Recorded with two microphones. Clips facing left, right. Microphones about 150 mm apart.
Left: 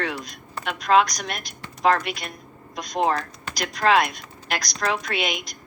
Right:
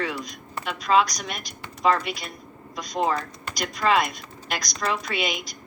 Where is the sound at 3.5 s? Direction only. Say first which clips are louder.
Left 2 dB; centre (ahead or behind).